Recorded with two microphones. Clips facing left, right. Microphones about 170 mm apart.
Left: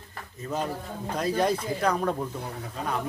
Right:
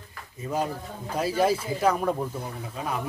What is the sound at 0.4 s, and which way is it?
A man's voice, 10° right (ahead or behind).